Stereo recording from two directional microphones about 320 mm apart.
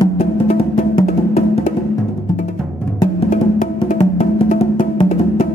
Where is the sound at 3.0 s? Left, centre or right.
Centre.